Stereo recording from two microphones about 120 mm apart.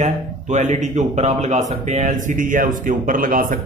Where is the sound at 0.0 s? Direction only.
85° right.